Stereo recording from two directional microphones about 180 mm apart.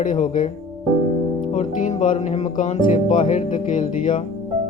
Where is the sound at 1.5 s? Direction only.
40° left (ahead or behind).